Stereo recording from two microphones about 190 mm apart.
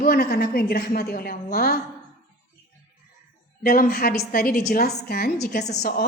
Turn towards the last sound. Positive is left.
turn(degrees=55)  # may be behind; listen again after turning